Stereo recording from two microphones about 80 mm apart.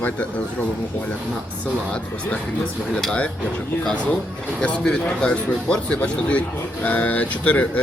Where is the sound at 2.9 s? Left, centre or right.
Centre.